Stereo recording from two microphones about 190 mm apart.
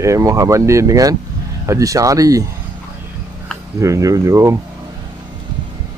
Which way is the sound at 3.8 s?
15° right (ahead or behind).